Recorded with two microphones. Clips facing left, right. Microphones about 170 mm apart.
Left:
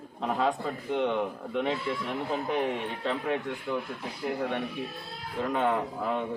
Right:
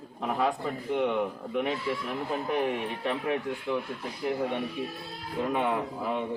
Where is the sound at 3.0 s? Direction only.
5° right (ahead or behind).